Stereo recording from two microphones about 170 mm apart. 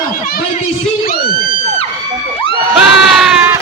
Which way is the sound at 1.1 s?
60° left (ahead or behind).